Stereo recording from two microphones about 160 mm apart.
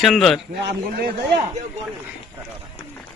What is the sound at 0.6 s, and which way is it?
Speech, 70° right (ahead or behind).